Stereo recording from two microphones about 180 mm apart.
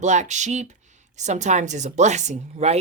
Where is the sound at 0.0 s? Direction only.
40° right (ahead or behind).